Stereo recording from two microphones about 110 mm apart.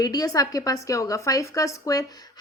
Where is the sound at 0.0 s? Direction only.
35° left (ahead or behind).